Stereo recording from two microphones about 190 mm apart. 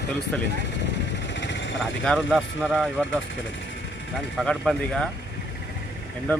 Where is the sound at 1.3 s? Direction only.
70° left (ahead or behind).